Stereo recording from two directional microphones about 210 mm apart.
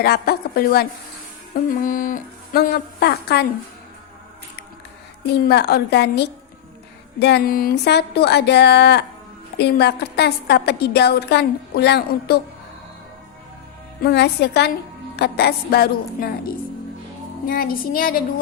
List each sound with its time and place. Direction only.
0.0 s a woman's voice: 50° left (ahead or behind)
5.5 s a woman's voice: 50° left (ahead or behind)
14.0 s a woman's voice: 50° left (ahead or behind)
17.5 s a woman's voice: 45° left (ahead or behind)